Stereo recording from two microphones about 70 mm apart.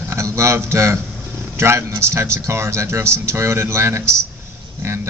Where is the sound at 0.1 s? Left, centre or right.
Right.